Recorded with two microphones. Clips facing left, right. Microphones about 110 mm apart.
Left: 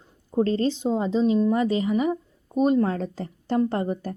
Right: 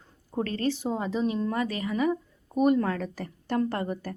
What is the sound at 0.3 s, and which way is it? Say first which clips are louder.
A woman's voice: left 6 dB; 25° left (ahead or behind).